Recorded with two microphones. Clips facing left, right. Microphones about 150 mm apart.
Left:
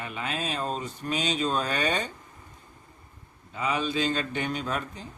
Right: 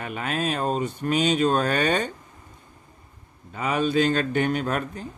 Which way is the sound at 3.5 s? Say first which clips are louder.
Right 5 dB; 55° right (ahead or behind).